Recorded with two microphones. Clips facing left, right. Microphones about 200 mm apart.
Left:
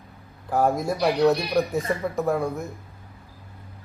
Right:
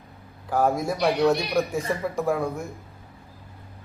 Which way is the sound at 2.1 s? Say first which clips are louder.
Left 1 dB; centre (ahead or behind).